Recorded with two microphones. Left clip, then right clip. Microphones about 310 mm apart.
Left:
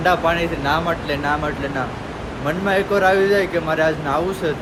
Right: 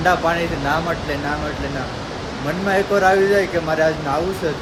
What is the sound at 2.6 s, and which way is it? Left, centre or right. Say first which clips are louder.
Speech: right 1 dB; centre.